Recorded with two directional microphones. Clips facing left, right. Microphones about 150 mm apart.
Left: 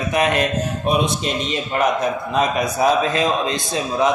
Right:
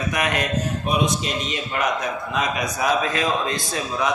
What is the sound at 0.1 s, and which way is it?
Speech, 25° left (ahead or behind).